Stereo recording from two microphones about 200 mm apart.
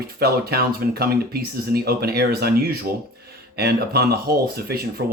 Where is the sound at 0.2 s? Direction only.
50° right (ahead or behind).